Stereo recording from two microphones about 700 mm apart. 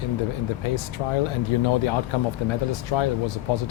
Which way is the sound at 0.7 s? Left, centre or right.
Left.